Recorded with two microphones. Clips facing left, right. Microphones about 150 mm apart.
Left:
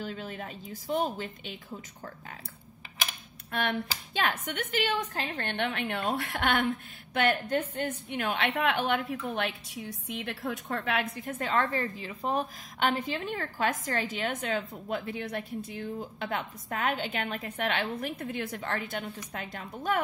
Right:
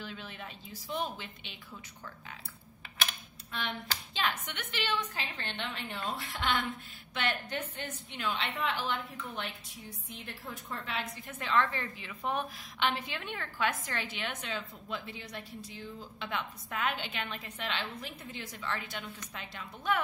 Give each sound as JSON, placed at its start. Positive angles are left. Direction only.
{"t": 0.0, "sound": "a woman's voice", "side_deg": 45}
{"t": 3.5, "sound": "a woman's voice", "side_deg": 55}
{"t": 7.2, "sound": "a woman's voice", "side_deg": 45}